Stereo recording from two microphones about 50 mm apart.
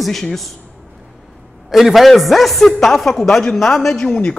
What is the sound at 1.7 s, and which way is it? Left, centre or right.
A man's voice, centre.